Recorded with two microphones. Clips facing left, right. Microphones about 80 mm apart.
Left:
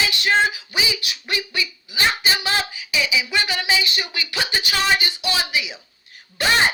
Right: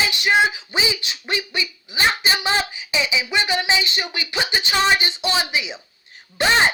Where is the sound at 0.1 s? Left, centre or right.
Centre.